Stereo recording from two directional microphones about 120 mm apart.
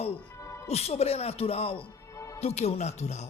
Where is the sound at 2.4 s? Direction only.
60° left (ahead or behind).